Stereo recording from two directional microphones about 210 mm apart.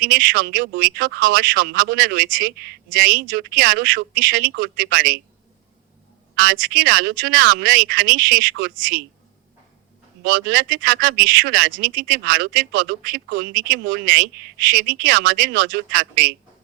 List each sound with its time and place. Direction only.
0.0 s speech: 45° right (ahead or behind)
6.5 s speech: 45° right (ahead or behind)
10.2 s speech: 45° right (ahead or behind)